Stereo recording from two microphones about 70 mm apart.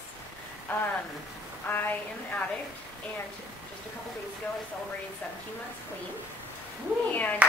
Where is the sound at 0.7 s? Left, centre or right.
Left.